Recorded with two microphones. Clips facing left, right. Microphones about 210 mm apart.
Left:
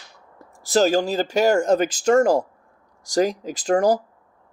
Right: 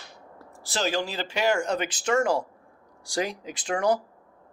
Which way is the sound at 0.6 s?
45° left (ahead or behind).